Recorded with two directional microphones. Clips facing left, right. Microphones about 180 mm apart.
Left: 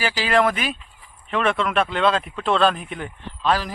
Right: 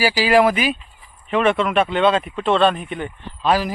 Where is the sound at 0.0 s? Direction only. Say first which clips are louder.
Right 5 dB; 5° right (ahead or behind).